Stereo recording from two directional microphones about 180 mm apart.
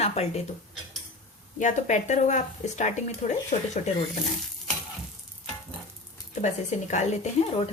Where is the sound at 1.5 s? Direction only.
40° left (ahead or behind).